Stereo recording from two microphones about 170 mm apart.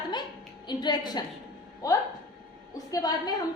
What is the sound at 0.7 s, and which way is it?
A woman's voice, 25° left (ahead or behind).